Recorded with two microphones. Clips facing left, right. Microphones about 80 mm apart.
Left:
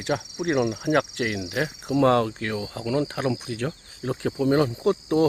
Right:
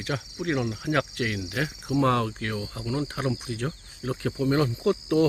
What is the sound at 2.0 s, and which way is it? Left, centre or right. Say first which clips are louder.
Speech: left 4 dB; left.